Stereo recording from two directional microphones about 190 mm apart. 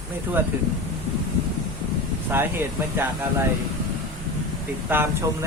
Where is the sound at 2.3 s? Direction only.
10° right (ahead or behind).